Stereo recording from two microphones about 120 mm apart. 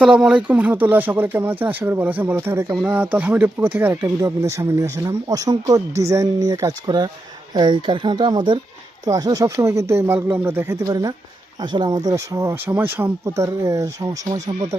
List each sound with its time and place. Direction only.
0.0 s speech: 5° right (ahead or behind); by 14.8 s 25° right (ahead or behind)